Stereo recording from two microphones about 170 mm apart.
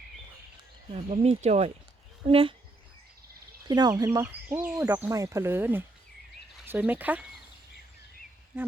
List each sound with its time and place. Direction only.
0.9 s speech: 40° right (ahead or behind)
3.7 s speech: 25° right (ahead or behind)
4.4 s speech: 10° right (ahead or behind)